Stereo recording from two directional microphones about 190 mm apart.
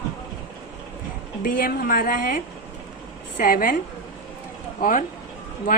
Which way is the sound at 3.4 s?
45° left (ahead or behind).